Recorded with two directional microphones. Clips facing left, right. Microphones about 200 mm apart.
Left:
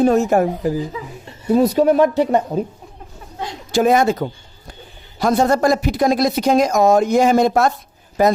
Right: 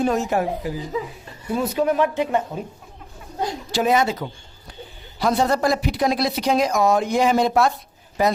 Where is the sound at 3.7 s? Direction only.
50° left (ahead or behind).